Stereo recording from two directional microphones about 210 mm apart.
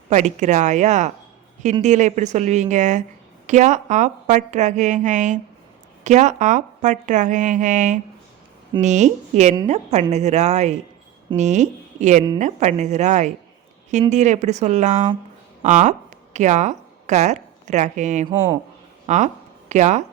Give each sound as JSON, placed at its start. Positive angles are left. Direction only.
{"t": 0.1, "sound": "a woman's voice", "side_deg": -35}